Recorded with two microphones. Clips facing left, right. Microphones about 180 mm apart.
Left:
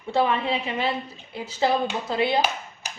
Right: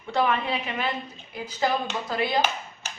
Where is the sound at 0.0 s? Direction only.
25° left (ahead or behind).